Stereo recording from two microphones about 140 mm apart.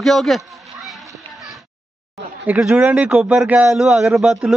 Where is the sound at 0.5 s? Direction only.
Centre (ahead or behind).